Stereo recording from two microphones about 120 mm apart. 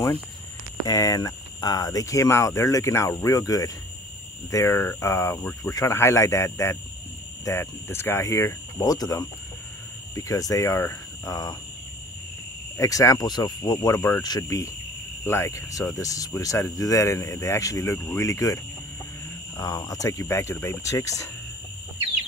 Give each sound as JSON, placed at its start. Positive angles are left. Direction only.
{"t": 0.8, "sound": "speech", "side_deg": 30}
{"t": 12.7, "sound": "speech", "side_deg": 25}
{"t": 15.2, "sound": "speech", "side_deg": 20}